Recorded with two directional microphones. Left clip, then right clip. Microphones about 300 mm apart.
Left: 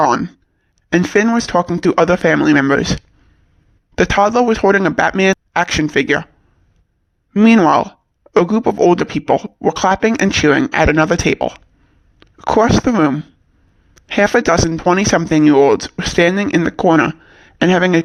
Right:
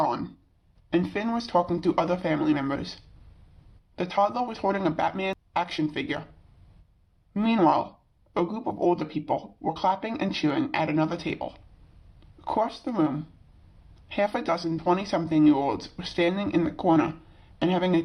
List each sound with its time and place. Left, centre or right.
0.0 s speech: left
3.9 s speech: left
7.3 s speech: left